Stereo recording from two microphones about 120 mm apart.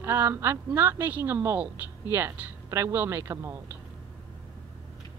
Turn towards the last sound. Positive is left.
turn(degrees=-20)  # may be behind; listen again after turning